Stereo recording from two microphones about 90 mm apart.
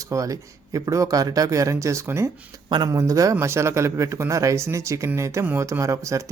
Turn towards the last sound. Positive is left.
turn(degrees=-35)  # may be behind; listen again after turning